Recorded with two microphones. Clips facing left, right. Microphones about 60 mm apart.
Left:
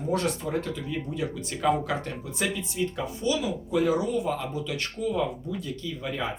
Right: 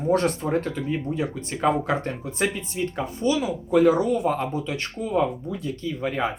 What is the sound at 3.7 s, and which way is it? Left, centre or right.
Speech, right.